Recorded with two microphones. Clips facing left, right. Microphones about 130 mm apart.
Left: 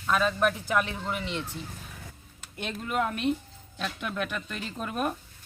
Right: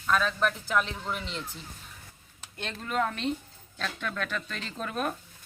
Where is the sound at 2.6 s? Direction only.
5° left (ahead or behind).